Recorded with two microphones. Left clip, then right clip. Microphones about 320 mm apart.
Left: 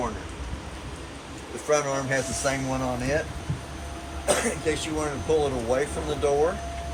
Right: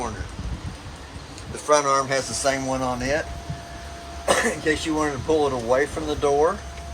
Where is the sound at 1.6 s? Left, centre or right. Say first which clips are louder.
Right 6 dB; centre.